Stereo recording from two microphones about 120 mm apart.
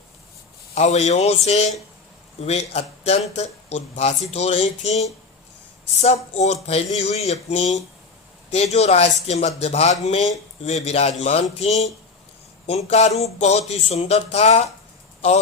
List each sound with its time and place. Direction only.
0.7 s a man's voice: 65° left (ahead or behind)